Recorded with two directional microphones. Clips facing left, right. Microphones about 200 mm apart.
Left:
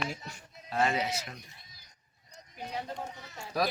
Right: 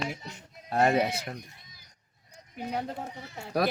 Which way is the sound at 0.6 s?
55° right (ahead or behind).